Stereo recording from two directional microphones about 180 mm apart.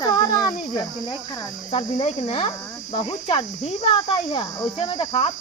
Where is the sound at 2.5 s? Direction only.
20° left (ahead or behind).